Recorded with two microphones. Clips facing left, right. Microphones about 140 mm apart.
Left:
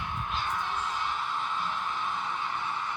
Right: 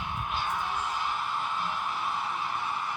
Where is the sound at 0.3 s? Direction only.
10° right (ahead or behind).